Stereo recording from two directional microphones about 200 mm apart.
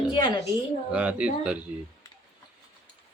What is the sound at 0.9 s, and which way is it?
Speech, 5° right (ahead or behind).